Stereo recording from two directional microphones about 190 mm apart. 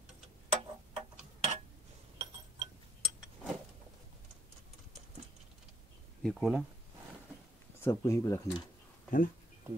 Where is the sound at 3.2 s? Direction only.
5° right (ahead or behind).